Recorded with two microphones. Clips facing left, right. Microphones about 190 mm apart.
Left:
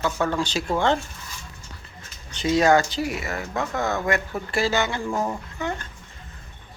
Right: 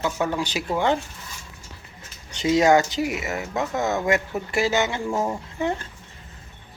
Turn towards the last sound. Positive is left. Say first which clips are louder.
# right 4 dB
turn(degrees=-30)  # may be behind; listen again after turning